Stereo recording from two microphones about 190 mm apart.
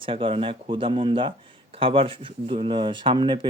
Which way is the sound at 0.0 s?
25° right (ahead or behind).